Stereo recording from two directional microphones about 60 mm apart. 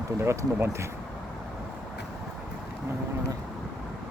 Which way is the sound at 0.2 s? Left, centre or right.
Right.